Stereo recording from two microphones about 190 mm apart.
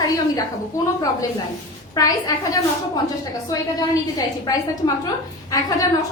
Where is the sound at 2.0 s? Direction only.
20° left (ahead or behind).